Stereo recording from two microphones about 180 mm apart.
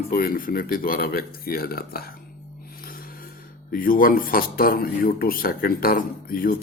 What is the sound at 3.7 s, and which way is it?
Speech, 50° left (ahead or behind).